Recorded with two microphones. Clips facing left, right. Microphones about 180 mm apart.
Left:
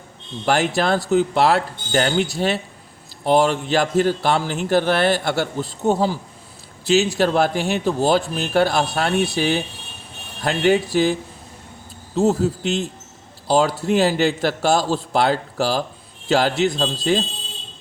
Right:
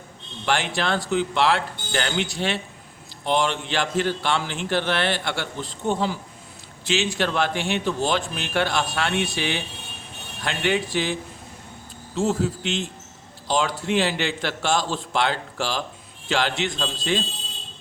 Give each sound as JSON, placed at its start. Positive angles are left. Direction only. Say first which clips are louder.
{"t": 0.4, "sound": "a man's voice", "louder": "left 5 dB", "side_deg": 40}